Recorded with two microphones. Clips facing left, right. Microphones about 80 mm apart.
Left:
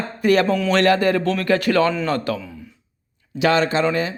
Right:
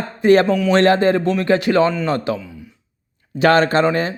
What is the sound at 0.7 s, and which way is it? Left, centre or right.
A man's voice, right.